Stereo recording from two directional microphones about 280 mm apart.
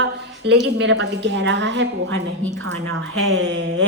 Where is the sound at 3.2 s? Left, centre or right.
Right.